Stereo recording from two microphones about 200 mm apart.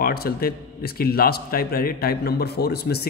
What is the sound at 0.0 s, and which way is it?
A man's voice, 50° left (ahead or behind).